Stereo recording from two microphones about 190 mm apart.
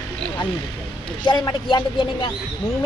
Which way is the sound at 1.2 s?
20° left (ahead or behind).